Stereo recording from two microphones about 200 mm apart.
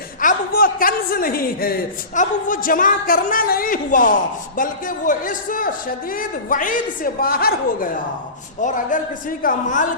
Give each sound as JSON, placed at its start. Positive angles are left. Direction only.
{"t": 0.2, "sound": "a man's voice", "side_deg": 45}